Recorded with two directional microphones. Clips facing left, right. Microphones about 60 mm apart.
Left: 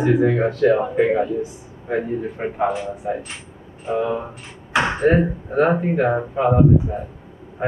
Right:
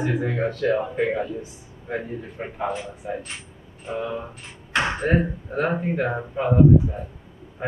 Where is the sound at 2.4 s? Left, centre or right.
Left.